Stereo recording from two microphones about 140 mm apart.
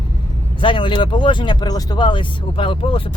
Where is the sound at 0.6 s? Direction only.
35° left (ahead or behind).